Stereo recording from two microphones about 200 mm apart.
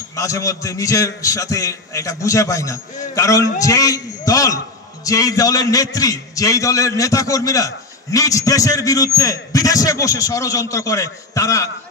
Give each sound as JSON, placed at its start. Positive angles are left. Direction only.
{"t": 0.1, "sound": "a man's voice", "side_deg": 15}